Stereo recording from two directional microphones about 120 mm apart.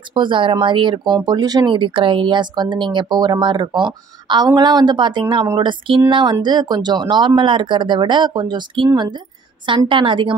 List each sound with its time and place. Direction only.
0.1 s a woman's voice: 45° right (ahead or behind)